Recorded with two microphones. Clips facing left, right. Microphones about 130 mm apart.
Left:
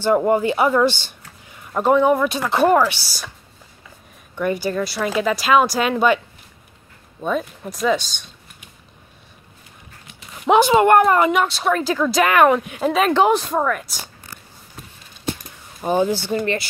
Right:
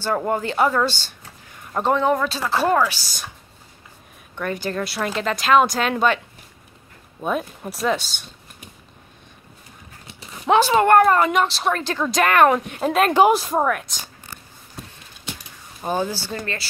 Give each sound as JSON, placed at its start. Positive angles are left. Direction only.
{"t": 0.0, "sound": "speech", "side_deg": 15}
{"t": 1.6, "sound": "speech", "side_deg": 5}
{"t": 2.8, "sound": "speech", "side_deg": 10}
{"t": 4.4, "sound": "speech", "side_deg": 10}
{"t": 7.2, "sound": "speech", "side_deg": -5}
{"t": 10.4, "sound": "speech", "side_deg": 10}
{"t": 15.9, "sound": "speech", "side_deg": 20}